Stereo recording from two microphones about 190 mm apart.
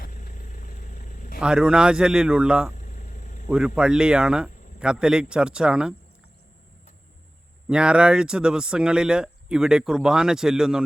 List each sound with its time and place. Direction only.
0.0 s vehicle: 45° left (ahead or behind)
1.4 s speech: 5° right (ahead or behind)
2.7 s vehicle: 40° left (ahead or behind)
3.8 s speech: 5° right (ahead or behind)
7.7 s speech: 5° right (ahead or behind)